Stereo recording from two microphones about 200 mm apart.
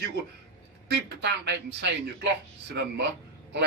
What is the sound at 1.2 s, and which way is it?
A man's voice, 60° right (ahead or behind).